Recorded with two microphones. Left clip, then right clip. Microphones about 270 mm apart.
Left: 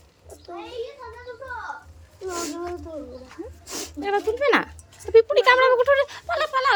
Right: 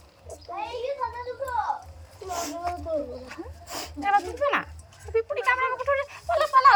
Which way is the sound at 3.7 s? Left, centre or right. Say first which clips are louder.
Right 2 dB; centre.